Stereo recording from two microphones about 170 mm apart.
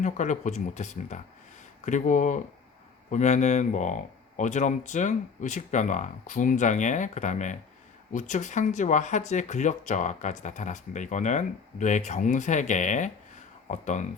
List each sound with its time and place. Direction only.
0.0 s speech: 45° left (ahead or behind)